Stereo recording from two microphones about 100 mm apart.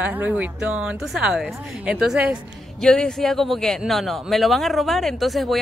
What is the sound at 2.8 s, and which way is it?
Speech, 5° left (ahead or behind).